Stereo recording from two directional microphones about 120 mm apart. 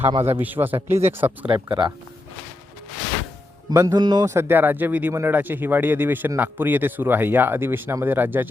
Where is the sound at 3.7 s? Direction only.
25° right (ahead or behind).